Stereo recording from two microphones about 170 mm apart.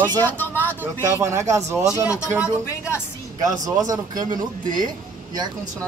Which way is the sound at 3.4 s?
20° right (ahead or behind).